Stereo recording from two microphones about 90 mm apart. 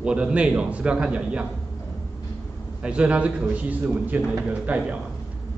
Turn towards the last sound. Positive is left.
turn(degrees=-15)  # may be behind; listen again after turning